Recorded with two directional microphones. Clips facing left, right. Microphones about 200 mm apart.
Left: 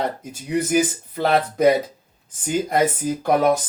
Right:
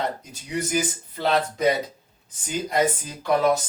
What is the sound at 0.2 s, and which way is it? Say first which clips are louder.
Speech: left 6 dB; 55° left (ahead or behind).